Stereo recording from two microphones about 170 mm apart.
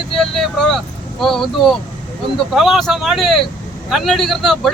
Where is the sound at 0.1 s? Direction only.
Centre (ahead or behind).